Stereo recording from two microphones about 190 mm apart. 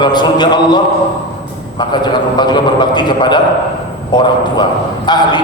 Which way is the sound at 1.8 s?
25° left (ahead or behind).